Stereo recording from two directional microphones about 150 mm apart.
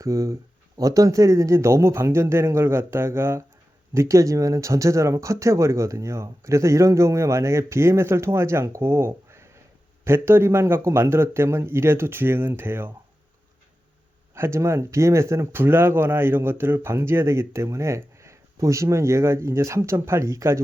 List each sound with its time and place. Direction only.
0.0 s speech: 20° right (ahead or behind)
14.3 s speech: 15° right (ahead or behind)